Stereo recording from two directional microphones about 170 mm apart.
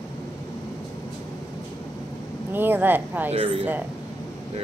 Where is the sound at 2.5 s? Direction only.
10° right (ahead or behind).